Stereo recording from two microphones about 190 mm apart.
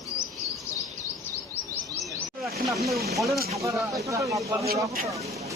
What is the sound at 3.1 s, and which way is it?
Speech, centre (ahead or behind).